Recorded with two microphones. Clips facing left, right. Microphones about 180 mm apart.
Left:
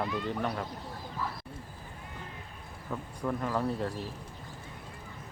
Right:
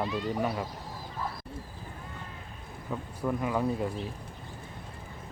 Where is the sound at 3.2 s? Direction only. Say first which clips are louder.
Right 2 dB; 5° right (ahead or behind).